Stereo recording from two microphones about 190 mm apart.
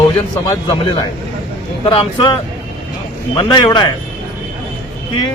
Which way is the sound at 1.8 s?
25° left (ahead or behind).